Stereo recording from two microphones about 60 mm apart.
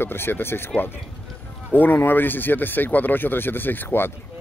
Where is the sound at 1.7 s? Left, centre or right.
Left.